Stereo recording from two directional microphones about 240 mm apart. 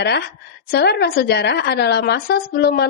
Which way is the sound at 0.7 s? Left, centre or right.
Left.